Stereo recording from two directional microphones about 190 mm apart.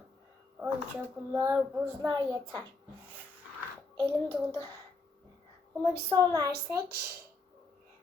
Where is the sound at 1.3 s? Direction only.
10° right (ahead or behind).